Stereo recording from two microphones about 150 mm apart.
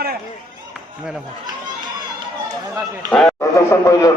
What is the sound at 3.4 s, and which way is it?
Speech, 20° left (ahead or behind).